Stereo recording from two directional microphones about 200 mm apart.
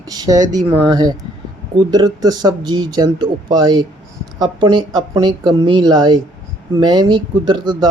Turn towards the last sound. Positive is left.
turn(degrees=-20)  # may be behind; listen again after turning